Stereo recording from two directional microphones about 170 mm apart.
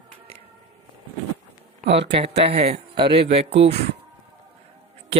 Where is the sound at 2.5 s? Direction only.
35° right (ahead or behind).